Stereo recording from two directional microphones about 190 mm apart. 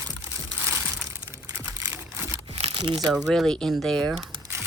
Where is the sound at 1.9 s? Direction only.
10° right (ahead or behind).